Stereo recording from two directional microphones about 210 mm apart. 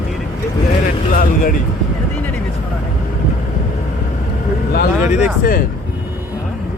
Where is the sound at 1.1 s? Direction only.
40° left (ahead or behind).